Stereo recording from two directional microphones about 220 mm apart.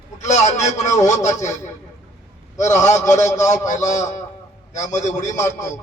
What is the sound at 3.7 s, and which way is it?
A man's voice, 35° left (ahead or behind).